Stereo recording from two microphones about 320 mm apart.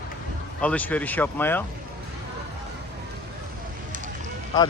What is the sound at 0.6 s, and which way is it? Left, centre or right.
Speech, centre.